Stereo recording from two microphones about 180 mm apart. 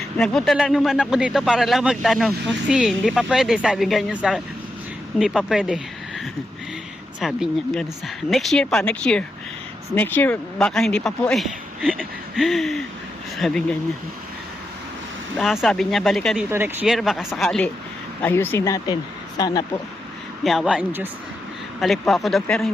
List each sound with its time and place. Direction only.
0.2 s speech: centre (ahead or behind)
15.4 s speech: centre (ahead or behind)
16.5 s speech: 15° right (ahead or behind)
16.8 s speech: centre (ahead or behind); by 19.8 s 20° left (ahead or behind)
20.4 s speech: centre (ahead or behind)